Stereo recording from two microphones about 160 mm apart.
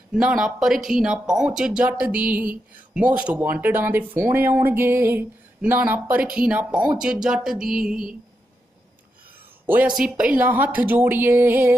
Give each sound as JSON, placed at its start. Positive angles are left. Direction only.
{"t": 0.1, "sound": "speech", "side_deg": -5}
{"t": 9.7, "sound": "speech", "side_deg": -10}